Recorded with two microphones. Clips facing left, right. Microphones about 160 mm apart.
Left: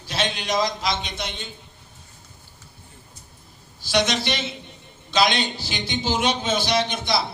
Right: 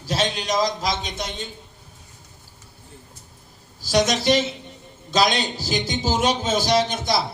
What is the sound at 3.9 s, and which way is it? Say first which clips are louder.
A man's voice: right 4 dB; 40° right (ahead or behind).